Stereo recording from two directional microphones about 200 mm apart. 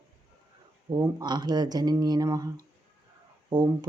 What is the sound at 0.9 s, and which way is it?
Speech, 20° right (ahead or behind).